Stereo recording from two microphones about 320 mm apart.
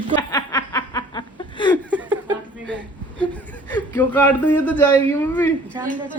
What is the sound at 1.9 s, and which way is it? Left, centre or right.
Chuckle, centre.